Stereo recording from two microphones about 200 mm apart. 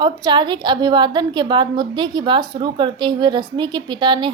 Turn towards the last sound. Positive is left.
turn(degrees=-25)  # may be behind; listen again after turning